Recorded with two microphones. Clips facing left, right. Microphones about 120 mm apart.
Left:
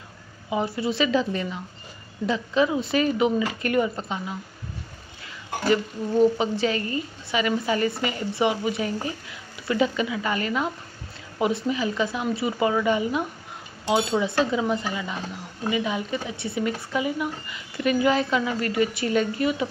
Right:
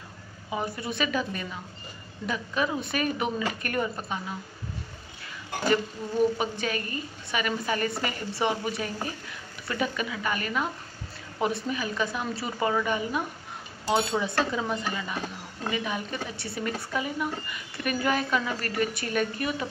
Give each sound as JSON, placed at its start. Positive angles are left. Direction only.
{"t": 0.5, "sound": "a woman's voice", "side_deg": 20}
{"t": 5.7, "sound": "a woman's voice", "side_deg": 20}
{"t": 14.2, "sound": "a woman's voice", "side_deg": 20}